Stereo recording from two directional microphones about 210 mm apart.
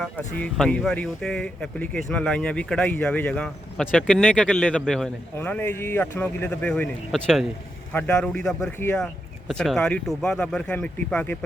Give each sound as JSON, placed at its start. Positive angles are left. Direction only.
{"t": 0.0, "sound": "speech", "side_deg": 5}